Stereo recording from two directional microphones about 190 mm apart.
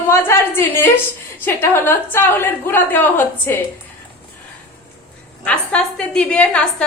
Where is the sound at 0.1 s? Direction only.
10° left (ahead or behind).